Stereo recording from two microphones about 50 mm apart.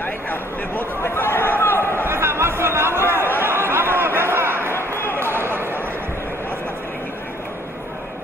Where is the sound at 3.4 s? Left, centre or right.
Right.